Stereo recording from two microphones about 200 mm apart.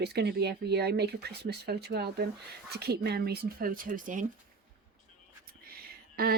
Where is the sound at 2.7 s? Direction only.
55° right (ahead or behind).